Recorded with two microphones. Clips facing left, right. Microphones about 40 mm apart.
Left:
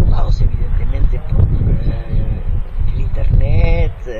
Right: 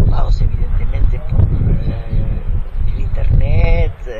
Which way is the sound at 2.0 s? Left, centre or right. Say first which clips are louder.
Even; left.